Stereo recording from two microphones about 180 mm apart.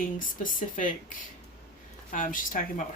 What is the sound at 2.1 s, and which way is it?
Speech, 45° left (ahead or behind).